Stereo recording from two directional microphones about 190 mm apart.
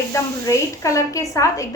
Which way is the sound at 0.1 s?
15° left (ahead or behind).